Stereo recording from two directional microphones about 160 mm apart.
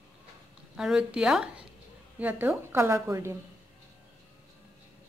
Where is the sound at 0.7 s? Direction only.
5° right (ahead or behind).